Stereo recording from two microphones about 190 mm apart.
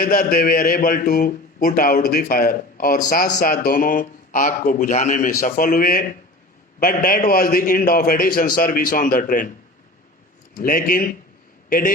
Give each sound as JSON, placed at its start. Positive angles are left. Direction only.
{"t": 0.0, "sound": "a man's voice", "side_deg": 50}
{"t": 10.5, "sound": "a man's voice", "side_deg": 50}